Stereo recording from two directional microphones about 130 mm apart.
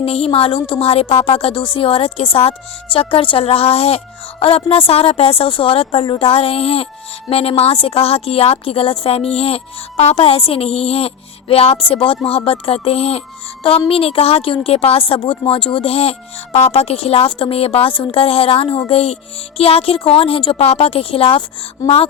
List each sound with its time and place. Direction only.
0.0 s a woman's voice: 50° left (ahead or behind)